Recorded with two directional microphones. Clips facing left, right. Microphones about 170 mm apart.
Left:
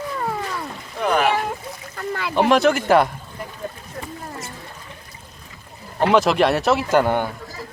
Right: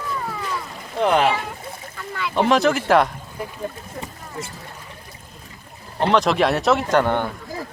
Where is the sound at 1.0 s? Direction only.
25° right (ahead or behind).